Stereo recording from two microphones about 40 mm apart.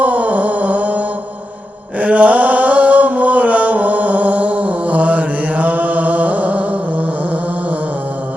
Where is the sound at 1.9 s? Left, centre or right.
Right.